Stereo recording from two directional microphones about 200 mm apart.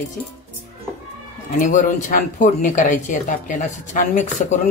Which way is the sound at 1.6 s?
40° left (ahead or behind).